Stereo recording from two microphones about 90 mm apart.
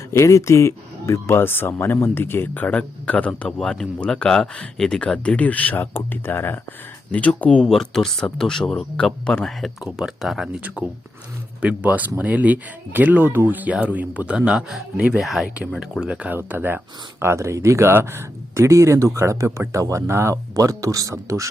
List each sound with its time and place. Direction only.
0.1 s speech: 35° left (ahead or behind); by 10.6 s centre (ahead or behind)
11.6 s speech: 15° right (ahead or behind); by 21.5 s 35° right (ahead or behind)